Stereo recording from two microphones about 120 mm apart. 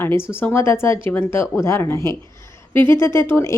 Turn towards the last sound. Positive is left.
turn(degrees=20)  # may be behind; listen again after turning